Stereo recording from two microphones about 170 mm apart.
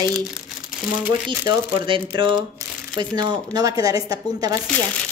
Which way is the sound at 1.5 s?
30° right (ahead or behind).